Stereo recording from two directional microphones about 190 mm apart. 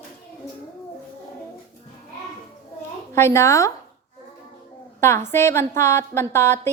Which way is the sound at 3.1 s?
15° left (ahead or behind).